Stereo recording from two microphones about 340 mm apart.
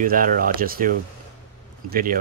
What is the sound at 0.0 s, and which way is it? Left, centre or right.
Speech, right.